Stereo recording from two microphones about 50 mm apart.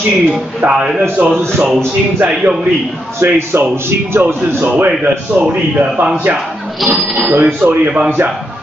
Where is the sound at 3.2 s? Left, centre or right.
Right.